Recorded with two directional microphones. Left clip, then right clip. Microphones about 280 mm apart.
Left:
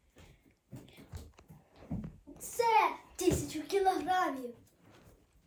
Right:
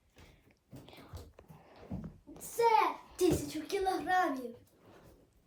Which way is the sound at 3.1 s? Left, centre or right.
Centre.